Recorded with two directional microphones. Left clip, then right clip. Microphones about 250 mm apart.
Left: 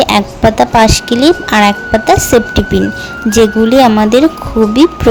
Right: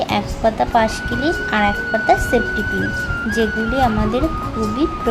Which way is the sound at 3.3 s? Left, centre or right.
Left.